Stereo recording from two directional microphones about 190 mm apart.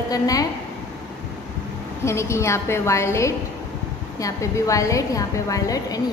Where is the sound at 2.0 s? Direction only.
15° left (ahead or behind).